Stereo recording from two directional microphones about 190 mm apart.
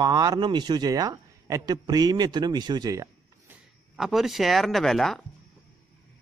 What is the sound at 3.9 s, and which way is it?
Speech, centre (ahead or behind).